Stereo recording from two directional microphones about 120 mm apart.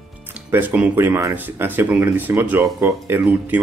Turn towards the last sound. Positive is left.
turn(degrees=-15)  # may be behind; listen again after turning